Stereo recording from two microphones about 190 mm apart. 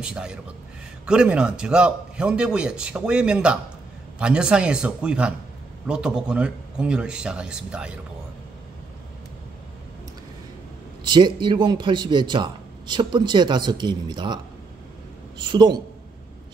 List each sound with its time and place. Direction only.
0.0 s a man's voice: 5° right (ahead or behind)
11.1 s a man's voice: 25° right (ahead or behind)